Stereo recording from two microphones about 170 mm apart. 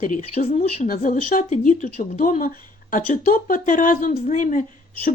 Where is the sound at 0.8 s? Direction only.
50° left (ahead or behind).